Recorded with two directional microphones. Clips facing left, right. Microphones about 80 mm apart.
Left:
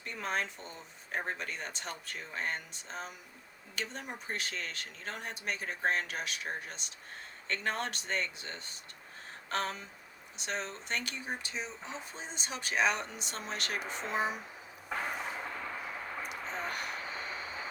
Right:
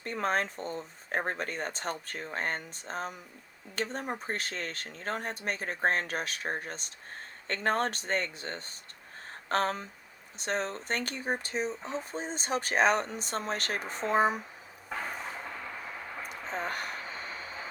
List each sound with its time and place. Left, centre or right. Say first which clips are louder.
0.0 s speech: right 6 dB; right
14.8 s a sound: even; centre
16.1 s vehicle: even; centre
16.5 s vehicle: right 5 dB; right